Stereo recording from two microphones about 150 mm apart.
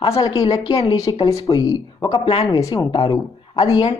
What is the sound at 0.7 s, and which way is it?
Speech, 30° left (ahead or behind).